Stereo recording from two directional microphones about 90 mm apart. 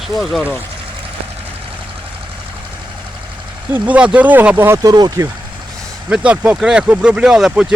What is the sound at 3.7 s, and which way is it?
Speech, 15° right (ahead or behind).